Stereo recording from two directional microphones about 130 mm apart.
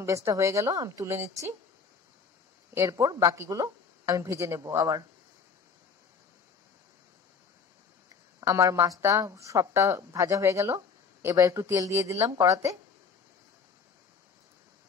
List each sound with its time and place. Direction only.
0.0 s a woman's voice: 25° right (ahead or behind)
2.7 s a woman's voice: 25° right (ahead or behind)
8.4 s a woman's voice: 25° right (ahead or behind)